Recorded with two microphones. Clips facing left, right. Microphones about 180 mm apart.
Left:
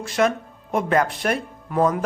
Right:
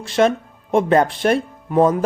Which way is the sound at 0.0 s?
30° right (ahead or behind).